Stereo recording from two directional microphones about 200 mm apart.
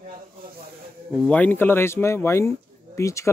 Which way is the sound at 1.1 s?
5° left (ahead or behind).